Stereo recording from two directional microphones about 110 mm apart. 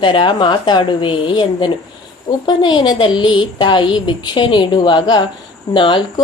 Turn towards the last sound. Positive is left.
turn(degrees=45)  # may be behind; listen again after turning